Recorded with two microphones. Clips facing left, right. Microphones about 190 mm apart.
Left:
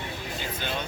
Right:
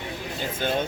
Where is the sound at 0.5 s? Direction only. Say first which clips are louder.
Right 9 dB; 45° right (ahead or behind).